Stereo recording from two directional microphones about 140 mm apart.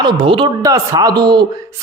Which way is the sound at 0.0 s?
35° right (ahead or behind).